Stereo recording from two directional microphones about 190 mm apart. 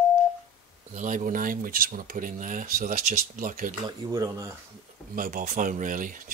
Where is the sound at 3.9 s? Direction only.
20° right (ahead or behind).